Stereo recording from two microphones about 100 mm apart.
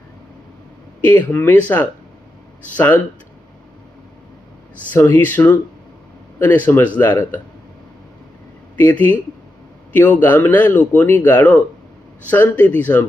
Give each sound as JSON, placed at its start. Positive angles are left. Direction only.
{"t": 1.0, "sound": "speech", "side_deg": 20}
{"t": 4.9, "sound": "speech", "side_deg": 25}
{"t": 8.7, "sound": "speech", "side_deg": 20}